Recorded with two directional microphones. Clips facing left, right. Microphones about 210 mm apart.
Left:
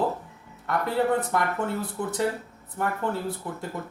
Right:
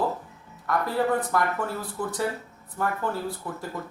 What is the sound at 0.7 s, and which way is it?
Speech, 25° left (ahead or behind).